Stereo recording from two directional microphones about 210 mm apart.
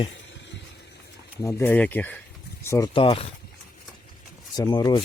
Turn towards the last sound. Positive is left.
turn(degrees=20)  # may be behind; listen again after turning